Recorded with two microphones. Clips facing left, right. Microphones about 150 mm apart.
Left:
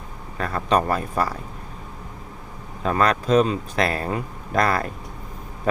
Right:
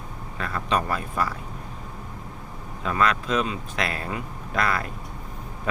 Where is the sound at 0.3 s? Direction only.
40° left (ahead or behind).